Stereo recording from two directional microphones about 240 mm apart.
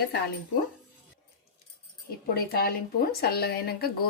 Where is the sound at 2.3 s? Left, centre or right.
Left.